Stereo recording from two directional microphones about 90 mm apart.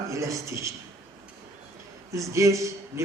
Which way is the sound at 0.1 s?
35° right (ahead or behind).